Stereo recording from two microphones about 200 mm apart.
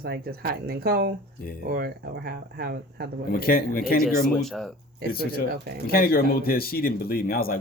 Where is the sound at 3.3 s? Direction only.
50° left (ahead or behind).